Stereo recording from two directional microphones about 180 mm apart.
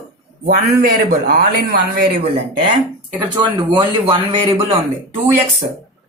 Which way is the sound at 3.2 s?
25° right (ahead or behind).